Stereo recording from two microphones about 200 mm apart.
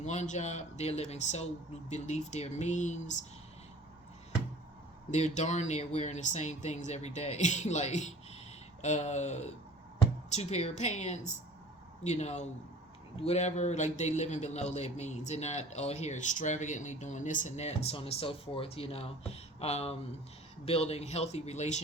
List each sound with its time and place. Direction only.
0.0 s a man's voice: 35° left (ahead or behind)
5.1 s a man's voice: 35° left (ahead or behind)